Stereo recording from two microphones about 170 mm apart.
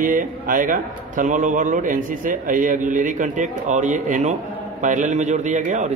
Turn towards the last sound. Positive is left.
turn(degrees=-45)  # may be behind; listen again after turning